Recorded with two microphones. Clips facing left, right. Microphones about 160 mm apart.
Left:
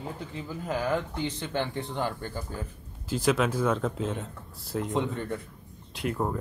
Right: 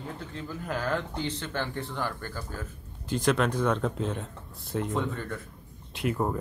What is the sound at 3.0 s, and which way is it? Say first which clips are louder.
Speech: even; 5° left (ahead or behind).